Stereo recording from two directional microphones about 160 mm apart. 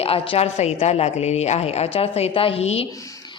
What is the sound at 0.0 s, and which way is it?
A woman's voice, 40° left (ahead or behind).